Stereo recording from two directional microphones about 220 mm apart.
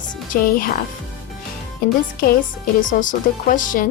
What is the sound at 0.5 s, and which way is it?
Speech, 40° left (ahead or behind).